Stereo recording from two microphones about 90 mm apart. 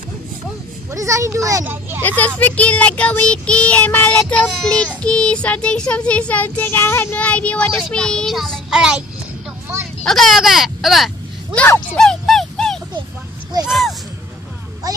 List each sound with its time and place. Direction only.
0.9 s a child's voice: 35° right (ahead or behind)
1.6 s a child's voice: 25° right (ahead or behind)
2.0 s child singing: 15° left (ahead or behind)
7.2 s child singing: 15° left (ahead or behind); by 9.0 s 10° right (ahead or behind)
10.0 s speech: centre (ahead or behind)
12.0 s dog: 5° left (ahead or behind)
13.7 s speech: centre (ahead or behind)